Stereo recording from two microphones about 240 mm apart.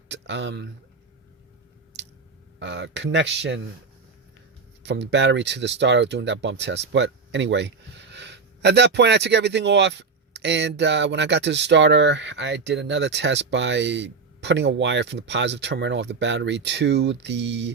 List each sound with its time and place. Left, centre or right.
0.1 s speech: right
2.6 s speech: right
4.8 s speech: right